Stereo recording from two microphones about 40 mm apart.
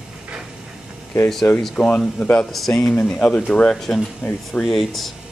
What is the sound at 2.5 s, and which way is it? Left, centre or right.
Speech, centre.